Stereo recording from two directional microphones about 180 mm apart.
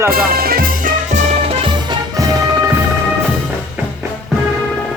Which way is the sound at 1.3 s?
30° right (ahead or behind).